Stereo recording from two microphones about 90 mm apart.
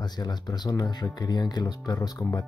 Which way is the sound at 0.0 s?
50° left (ahead or behind).